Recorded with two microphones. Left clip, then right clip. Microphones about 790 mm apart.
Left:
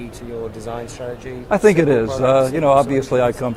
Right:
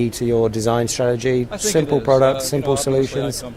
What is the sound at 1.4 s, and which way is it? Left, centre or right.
Speech, left.